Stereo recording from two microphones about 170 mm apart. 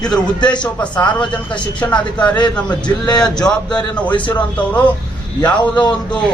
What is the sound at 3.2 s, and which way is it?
A man's voice, 5° left (ahead or behind).